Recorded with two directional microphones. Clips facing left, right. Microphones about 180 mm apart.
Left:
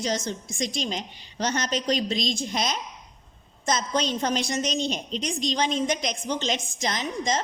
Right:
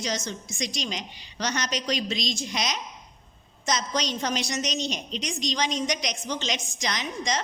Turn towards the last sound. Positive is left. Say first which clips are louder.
# left 3 dB
turn(degrees=45)  # may be behind; listen again after turning